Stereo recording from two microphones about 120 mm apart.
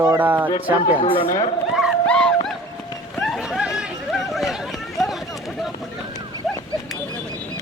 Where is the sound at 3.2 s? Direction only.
Centre (ahead or behind).